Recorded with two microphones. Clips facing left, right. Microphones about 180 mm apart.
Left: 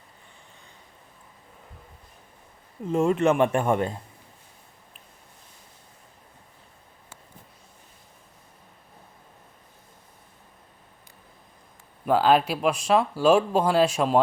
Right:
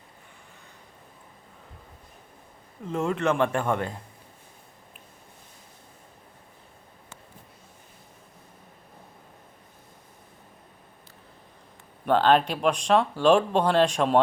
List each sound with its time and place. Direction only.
2.9 s speech: 20° left (ahead or behind)
12.0 s speech: 5° left (ahead or behind)